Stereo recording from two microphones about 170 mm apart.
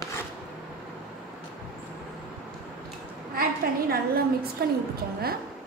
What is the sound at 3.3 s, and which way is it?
A woman's voice, 60° right (ahead or behind).